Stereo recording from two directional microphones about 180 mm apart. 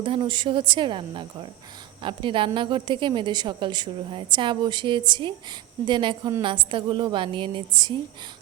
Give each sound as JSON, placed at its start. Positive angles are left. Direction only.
{"t": 0.0, "sound": "a woman's voice", "side_deg": -30}